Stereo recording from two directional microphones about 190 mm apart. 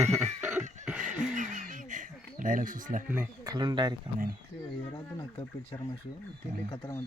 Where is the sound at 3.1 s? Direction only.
15° right (ahead or behind).